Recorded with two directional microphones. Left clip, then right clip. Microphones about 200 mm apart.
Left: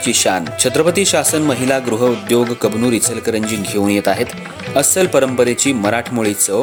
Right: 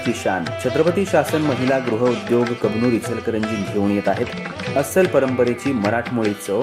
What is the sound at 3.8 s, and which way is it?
Speech, 35° left (ahead or behind).